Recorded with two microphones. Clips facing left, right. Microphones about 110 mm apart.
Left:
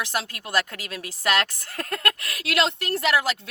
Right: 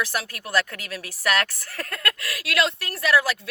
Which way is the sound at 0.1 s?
20° left (ahead or behind).